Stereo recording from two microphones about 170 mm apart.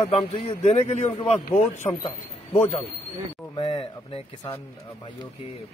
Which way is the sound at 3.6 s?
35° left (ahead or behind).